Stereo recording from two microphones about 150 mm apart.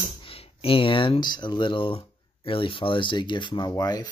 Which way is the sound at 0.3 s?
40° left (ahead or behind).